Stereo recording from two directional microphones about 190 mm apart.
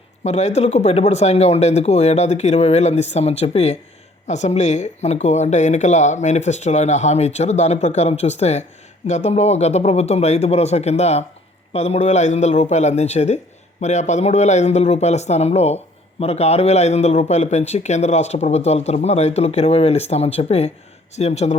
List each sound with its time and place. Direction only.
0.3 s a man's voice: 35° left (ahead or behind)